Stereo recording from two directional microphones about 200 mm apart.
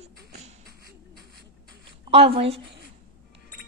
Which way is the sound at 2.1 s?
30° right (ahead or behind).